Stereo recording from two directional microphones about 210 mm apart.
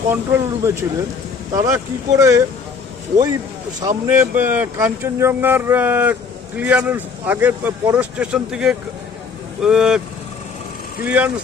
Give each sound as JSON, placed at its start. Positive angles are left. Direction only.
{"t": 0.1, "sound": "a man's voice", "side_deg": -15}
{"t": 3.8, "sound": "a man's voice", "side_deg": -20}
{"t": 11.0, "sound": "a man's voice", "side_deg": -5}